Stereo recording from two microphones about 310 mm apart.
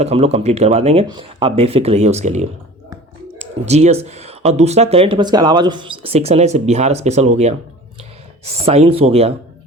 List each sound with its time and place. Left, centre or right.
0.0 s speech: centre
8.6 s speech: centre